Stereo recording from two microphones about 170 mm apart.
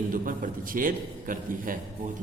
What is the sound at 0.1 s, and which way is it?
A man's voice, 55° right (ahead or behind).